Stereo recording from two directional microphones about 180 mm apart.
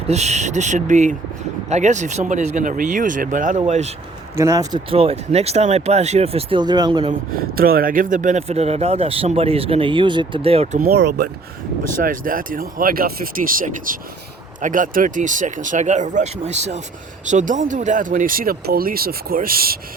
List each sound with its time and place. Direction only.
0.1 s speech: 40° right (ahead or behind)
4.4 s speech: 15° right (ahead or behind)
4.9 s speech: 30° right (ahead or behind)
7.5 s speech: 55° right (ahead or behind); by 10.8 s 35° right (ahead or behind)
10.8 s speech: 65° right (ahead or behind)
11.8 s speech: 50° right (ahead or behind)